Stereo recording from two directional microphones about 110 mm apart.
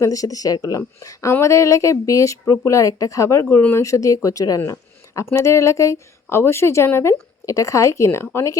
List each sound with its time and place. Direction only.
0.0 s speech: 30° left (ahead or behind)